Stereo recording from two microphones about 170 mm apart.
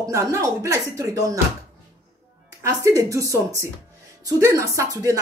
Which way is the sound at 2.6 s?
15° right (ahead or behind).